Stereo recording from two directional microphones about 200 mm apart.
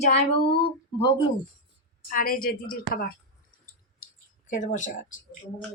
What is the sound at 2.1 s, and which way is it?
Speech, 45° left (ahead or behind).